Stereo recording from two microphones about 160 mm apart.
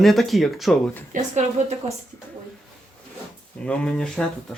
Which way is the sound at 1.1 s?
45° right (ahead or behind).